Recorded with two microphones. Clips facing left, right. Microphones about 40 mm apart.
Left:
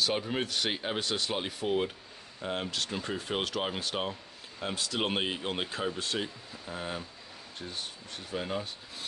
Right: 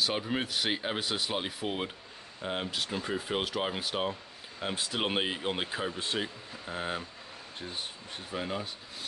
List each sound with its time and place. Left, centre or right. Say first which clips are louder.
0.0 s speech: even; centre
4.6 s speech: even; centre
5.0 s speech: right 1 dB; centre
6.1 s speech: right 1 dB; centre
8.3 s speech: left 1 dB; centre